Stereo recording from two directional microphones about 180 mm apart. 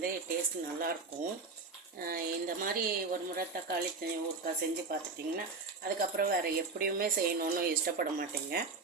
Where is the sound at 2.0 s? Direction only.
55° right (ahead or behind).